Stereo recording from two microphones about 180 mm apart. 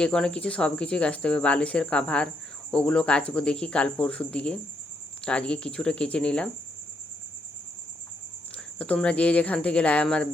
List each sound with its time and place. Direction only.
0.0 s speech: 5° left (ahead or behind)
8.5 s speech: 5° left (ahead or behind)